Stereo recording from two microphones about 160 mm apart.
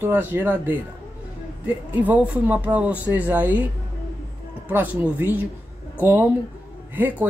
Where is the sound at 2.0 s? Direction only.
10° right (ahead or behind).